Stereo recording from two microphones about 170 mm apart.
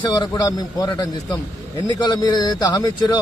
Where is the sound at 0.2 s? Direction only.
25° left (ahead or behind).